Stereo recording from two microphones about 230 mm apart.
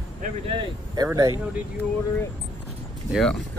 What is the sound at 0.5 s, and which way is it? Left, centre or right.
Speech, centre.